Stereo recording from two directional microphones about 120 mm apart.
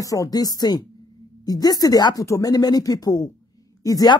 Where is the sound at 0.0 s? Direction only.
30° left (ahead or behind).